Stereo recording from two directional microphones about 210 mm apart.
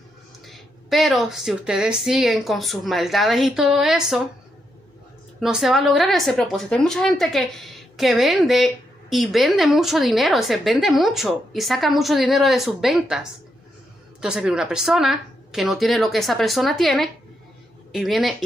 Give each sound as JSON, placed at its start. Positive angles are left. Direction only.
{"t": 0.5, "sound": "a woman's voice", "side_deg": 0}
{"t": 5.4, "sound": "a woman's voice", "side_deg": 0}